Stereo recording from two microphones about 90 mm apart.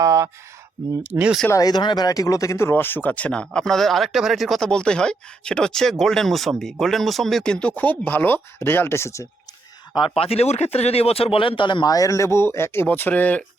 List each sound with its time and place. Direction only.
0.0 s speech: 35° right (ahead or behind)
1.5 s speech: 40° left (ahead or behind)
1.7 s speech: 55° left (ahead or behind)
2.0 s speech: 40° left (ahead or behind)
9.9 s speech: 80° left
10.9 s speech: 90° left; by 13.4 s 20° left (ahead or behind)